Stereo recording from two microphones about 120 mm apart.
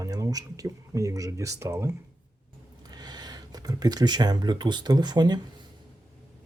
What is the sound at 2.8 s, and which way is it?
Speech, 35° right (ahead or behind).